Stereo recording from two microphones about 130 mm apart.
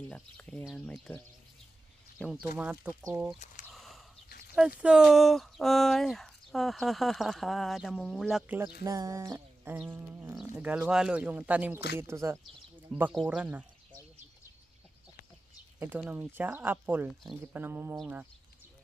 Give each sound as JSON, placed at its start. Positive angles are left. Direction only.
{"t": 0.1, "sound": "speech", "side_deg": 10}
{"t": 2.2, "sound": "speech", "side_deg": -5}
{"t": 3.3, "sound": "speech", "side_deg": 70}
{"t": 3.7, "sound": "a sound", "side_deg": 0}
{"t": 4.5, "sound": "speech", "side_deg": -10}
{"t": 8.8, "sound": "a sound", "side_deg": -25}
{"t": 9.6, "sound": "speech", "side_deg": -10}
{"t": 16.0, "sound": "speech", "side_deg": -20}